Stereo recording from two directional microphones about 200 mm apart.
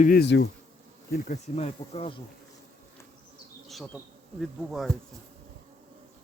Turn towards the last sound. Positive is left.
turn(degrees=0)  # may be behind; listen again after turning